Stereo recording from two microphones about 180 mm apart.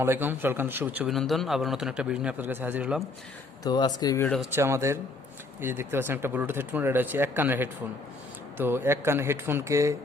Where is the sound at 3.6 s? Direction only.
20° left (ahead or behind).